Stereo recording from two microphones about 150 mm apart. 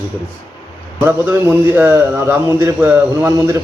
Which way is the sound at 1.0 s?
15° right (ahead or behind).